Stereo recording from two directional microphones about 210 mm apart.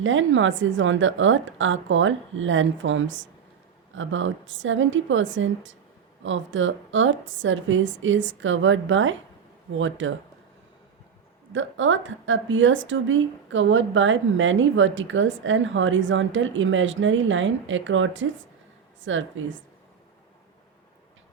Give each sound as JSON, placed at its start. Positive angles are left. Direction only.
{"t": 0.0, "sound": "a woman's voice", "side_deg": -65}
{"t": 11.5, "sound": "a woman's voice", "side_deg": -65}